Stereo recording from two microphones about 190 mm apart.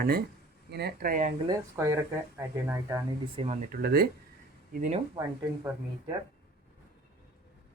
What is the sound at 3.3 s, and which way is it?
Speech, 35° right (ahead or behind).